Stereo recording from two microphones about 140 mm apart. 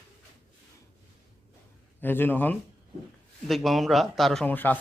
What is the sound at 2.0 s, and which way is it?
Speech, 15° left (ahead or behind).